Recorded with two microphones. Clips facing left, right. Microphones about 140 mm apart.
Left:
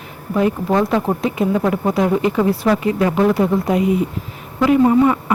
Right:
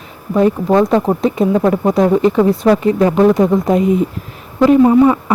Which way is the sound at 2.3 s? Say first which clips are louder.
Right 5 dB; 20° right (ahead or behind).